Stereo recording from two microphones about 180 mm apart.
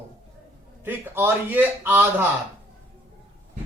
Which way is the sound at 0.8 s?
10° right (ahead or behind).